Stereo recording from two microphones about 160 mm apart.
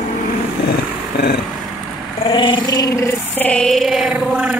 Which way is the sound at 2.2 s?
30° left (ahead or behind).